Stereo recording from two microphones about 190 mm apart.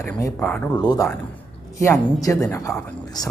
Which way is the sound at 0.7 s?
20° left (ahead or behind).